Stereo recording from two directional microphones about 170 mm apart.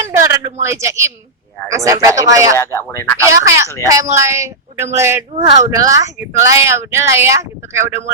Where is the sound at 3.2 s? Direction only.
15° right (ahead or behind).